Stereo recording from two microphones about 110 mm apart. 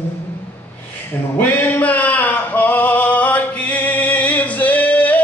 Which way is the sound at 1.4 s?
15° left (ahead or behind).